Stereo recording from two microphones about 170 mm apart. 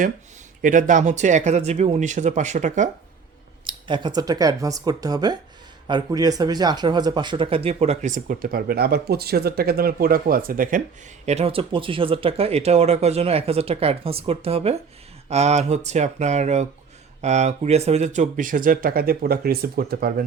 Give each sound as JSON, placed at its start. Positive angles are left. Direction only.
{"t": 0.6, "sound": "speech", "side_deg": -50}
{"t": 3.6, "sound": "speech", "side_deg": -30}
{"t": 11.3, "sound": "speech", "side_deg": -35}